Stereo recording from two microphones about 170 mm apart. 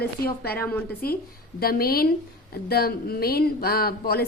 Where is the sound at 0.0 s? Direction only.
65° left (ahead or behind).